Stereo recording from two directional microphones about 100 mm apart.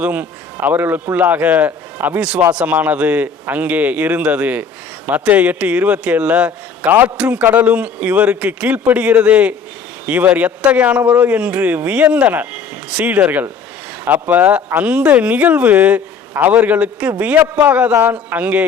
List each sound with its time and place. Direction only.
0.0 s a man's voice: 15° right (ahead or behind)
17.7 s a man's voice: 10° right (ahead or behind)